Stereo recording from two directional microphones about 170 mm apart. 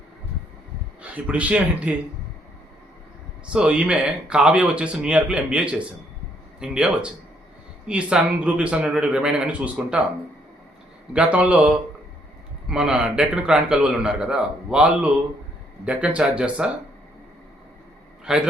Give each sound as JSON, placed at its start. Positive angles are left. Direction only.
{"t": 1.0, "sound": "speech", "side_deg": -10}
{"t": 3.5, "sound": "a man's voice", "side_deg": -5}
{"t": 11.1, "sound": "a man's voice", "side_deg": -5}
{"t": 18.3, "sound": "a man's voice", "side_deg": -5}